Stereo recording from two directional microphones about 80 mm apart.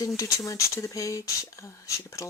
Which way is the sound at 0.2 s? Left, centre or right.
Left.